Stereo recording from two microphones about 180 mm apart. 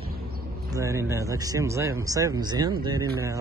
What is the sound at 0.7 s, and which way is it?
A man's voice, 15° right (ahead or behind).